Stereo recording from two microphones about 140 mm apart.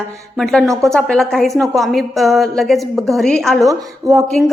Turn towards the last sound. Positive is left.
turn(degrees=-25)  # may be behind; listen again after turning